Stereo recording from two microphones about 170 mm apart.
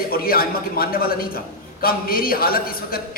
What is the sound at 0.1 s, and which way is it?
A man's voice, 60° left (ahead or behind).